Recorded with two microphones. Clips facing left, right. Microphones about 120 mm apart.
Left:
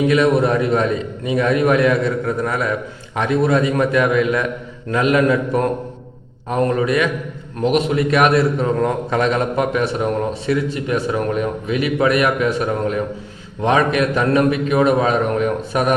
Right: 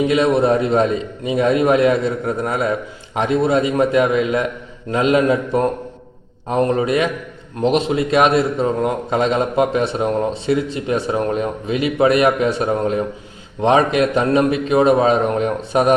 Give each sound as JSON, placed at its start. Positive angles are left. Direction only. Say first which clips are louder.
{"t": 0.1, "sound": "a man's voice", "louder": "even", "side_deg": -25}